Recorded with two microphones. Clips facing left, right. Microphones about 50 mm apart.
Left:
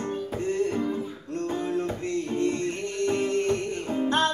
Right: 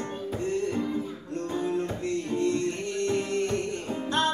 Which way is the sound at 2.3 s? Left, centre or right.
Left.